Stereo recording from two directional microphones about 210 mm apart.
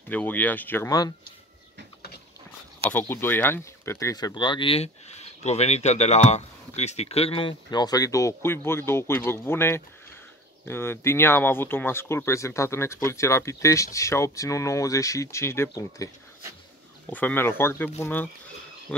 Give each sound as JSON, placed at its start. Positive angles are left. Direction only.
{"t": 0.1, "sound": "speech", "side_deg": 5}
{"t": 2.9, "sound": "speech", "side_deg": 10}
{"t": 17.1, "sound": "speech", "side_deg": 10}